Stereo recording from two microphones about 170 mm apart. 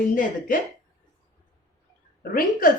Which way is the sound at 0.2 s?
50° left (ahead or behind).